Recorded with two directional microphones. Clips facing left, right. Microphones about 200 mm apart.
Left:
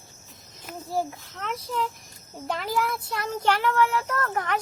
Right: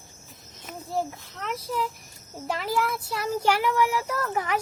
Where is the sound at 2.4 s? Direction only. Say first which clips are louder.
Even; centre (ahead or behind).